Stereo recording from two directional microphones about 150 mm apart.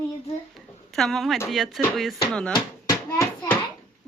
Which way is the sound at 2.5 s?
25° left (ahead or behind).